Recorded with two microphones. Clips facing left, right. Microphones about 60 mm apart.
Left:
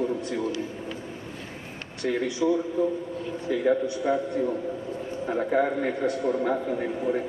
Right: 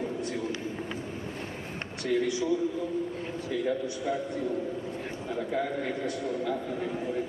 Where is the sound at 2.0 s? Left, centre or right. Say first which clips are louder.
Left 2 dB; left.